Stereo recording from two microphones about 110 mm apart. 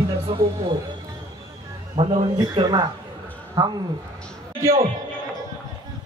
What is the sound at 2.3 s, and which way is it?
Speech, 40° right (ahead or behind).